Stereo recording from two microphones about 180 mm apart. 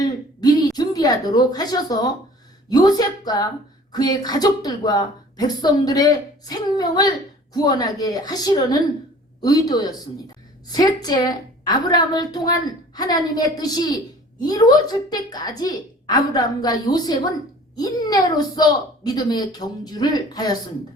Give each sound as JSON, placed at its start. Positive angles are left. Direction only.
{"t": 0.0, "sound": "a woman's voice", "side_deg": 20}